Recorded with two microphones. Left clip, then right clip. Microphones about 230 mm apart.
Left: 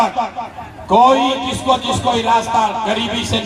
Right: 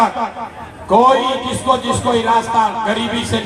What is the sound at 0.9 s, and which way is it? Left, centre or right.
Speech, left.